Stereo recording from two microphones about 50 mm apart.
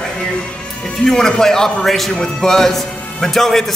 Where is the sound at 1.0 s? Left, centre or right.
Centre.